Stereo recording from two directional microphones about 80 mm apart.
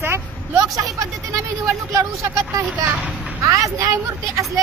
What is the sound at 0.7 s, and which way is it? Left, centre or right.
Speech, right.